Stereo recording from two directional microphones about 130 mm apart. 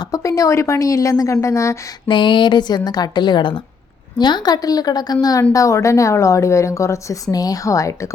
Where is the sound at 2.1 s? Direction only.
40° left (ahead or behind).